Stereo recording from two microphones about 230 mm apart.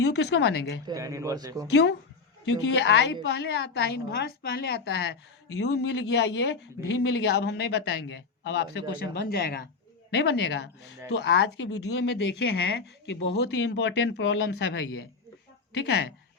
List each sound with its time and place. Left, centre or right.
0.2 s speech: left
0.9 s speech: centre
1.7 s speech: left